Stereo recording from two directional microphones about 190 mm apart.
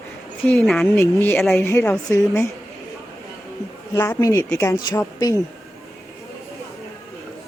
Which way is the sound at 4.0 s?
15° left (ahead or behind).